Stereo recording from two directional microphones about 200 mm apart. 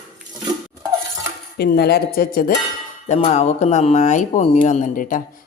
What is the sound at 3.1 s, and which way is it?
Speech, 35° left (ahead or behind).